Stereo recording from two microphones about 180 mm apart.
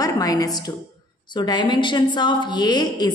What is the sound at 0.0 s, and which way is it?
A woman's voice, 20° left (ahead or behind).